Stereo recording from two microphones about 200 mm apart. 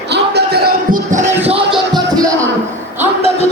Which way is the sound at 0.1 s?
55° right (ahead or behind).